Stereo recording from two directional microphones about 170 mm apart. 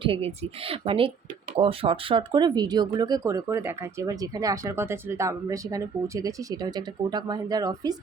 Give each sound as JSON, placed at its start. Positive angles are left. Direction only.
{"t": 0.0, "sound": "speech", "side_deg": -35}